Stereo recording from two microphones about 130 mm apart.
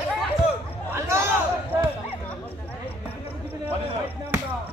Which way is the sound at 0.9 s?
20° right (ahead or behind).